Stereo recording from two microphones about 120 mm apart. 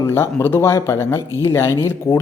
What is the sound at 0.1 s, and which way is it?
Speech, 20° left (ahead or behind).